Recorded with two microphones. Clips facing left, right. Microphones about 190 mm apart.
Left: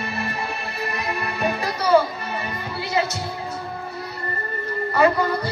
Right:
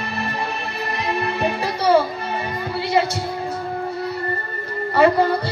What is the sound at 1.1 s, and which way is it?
Music, 30° right (ahead or behind).